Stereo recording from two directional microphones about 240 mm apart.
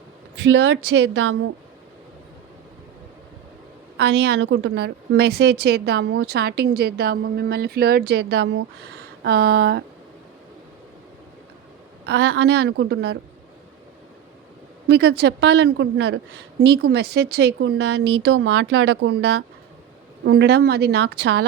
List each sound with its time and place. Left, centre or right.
0.3 s a woman's voice: right
3.9 s a woman's voice: right
12.0 s a woman's voice: right
14.8 s a woman's voice: right